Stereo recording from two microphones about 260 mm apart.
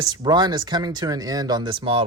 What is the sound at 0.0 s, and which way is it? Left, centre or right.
Speech, centre.